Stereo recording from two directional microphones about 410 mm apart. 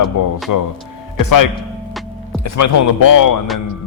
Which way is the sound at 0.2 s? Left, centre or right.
Left.